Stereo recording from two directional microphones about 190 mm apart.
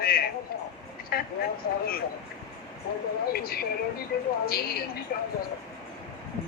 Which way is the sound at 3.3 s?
50° left (ahead or behind).